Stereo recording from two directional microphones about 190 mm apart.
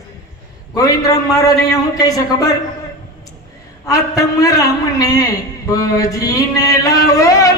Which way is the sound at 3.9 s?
20° left (ahead or behind).